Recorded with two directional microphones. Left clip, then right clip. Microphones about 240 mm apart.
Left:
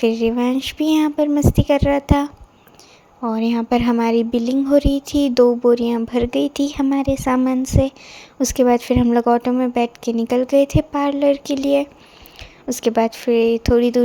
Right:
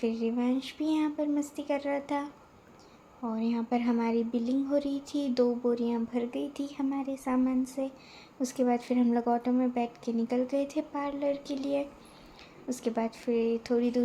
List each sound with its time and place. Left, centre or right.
0.0 s a woman's voice: left